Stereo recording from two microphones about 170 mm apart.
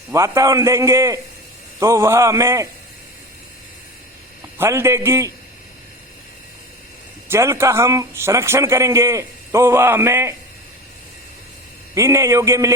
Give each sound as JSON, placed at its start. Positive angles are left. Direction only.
{"t": 0.1, "sound": "a man's voice", "side_deg": -20}
{"t": 4.5, "sound": "a man's voice", "side_deg": -15}
{"t": 7.3, "sound": "a man's voice", "side_deg": -15}
{"t": 11.9, "sound": "a man's voice", "side_deg": -15}